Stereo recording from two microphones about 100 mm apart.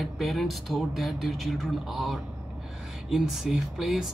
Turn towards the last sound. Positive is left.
turn(degrees=-5)  # may be behind; listen again after turning